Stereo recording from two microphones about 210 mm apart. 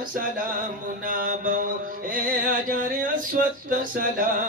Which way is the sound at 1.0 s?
40° right (ahead or behind).